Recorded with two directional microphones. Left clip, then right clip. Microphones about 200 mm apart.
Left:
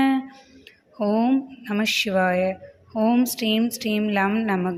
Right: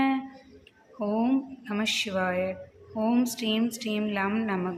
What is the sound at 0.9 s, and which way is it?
A woman's voice, 25° left (ahead or behind).